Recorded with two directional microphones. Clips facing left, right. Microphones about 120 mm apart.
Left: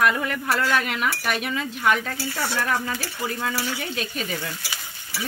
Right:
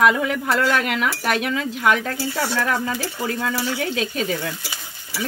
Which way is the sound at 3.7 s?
90° right.